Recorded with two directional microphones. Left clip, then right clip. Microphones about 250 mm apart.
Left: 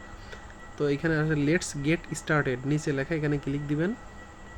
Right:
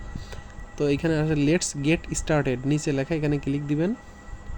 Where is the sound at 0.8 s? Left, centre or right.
Centre.